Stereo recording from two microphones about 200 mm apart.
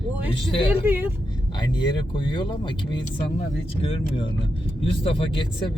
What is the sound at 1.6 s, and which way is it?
Speech, 25° left (ahead or behind).